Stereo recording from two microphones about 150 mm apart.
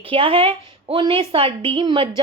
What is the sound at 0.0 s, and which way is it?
A woman's voice, 35° right (ahead or behind).